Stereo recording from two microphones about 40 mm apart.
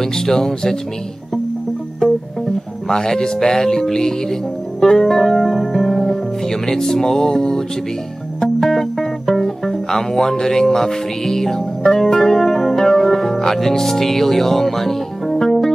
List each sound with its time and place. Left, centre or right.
0.0 s music: centre
2.0 s music: left
2.9 s speech: centre
6.5 s music: centre